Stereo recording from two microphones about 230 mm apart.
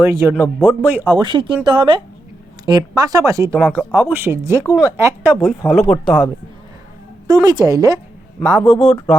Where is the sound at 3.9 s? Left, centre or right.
Centre.